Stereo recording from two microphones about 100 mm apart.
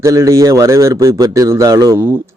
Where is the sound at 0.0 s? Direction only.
30° right (ahead or behind).